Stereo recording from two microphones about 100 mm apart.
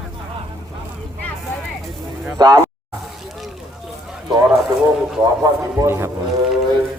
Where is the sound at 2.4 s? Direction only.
45° right (ahead or behind).